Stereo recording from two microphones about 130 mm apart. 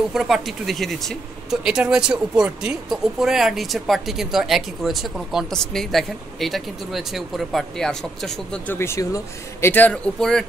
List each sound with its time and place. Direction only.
0.1 s speech: centre (ahead or behind)
8.7 s speech: 20° left (ahead or behind)